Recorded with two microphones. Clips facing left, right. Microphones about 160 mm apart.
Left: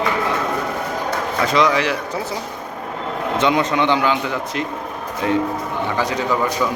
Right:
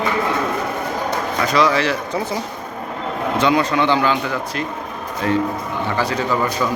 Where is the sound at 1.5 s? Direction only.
20° left (ahead or behind).